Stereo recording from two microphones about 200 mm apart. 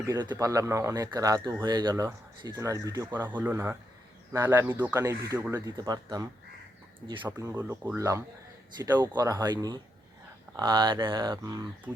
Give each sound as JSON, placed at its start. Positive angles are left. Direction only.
{"t": 0.1, "sound": "speech", "side_deg": -20}
{"t": 7.5, "sound": "speech", "side_deg": -10}